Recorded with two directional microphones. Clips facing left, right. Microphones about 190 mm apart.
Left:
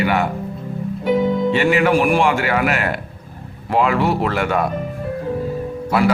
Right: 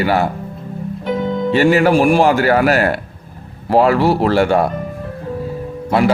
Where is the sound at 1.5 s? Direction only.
40° right (ahead or behind).